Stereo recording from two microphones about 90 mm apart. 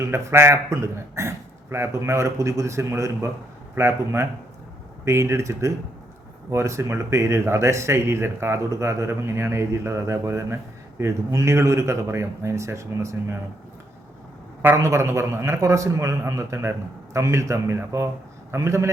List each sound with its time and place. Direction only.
0.0 s speech: 30° right (ahead or behind)
14.8 s speech: 35° right (ahead or behind)